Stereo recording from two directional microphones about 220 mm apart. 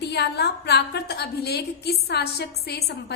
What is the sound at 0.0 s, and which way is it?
A woman's voice, 50° left (ahead or behind).